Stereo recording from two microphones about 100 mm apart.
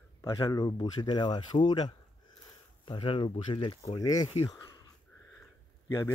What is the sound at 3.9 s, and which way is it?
Speech, 40° left (ahead or behind).